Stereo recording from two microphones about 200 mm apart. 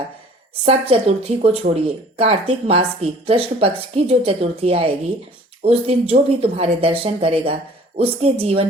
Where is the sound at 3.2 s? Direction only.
30° right (ahead or behind).